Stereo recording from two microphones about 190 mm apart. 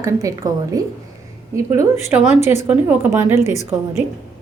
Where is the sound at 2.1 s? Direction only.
10° right (ahead or behind).